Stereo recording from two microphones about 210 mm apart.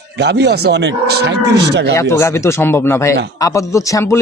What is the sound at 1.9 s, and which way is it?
A man's voice, 15° left (ahead or behind).